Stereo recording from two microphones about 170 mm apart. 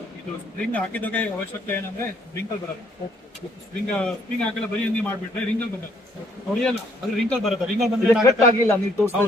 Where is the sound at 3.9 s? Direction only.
5° left (ahead or behind).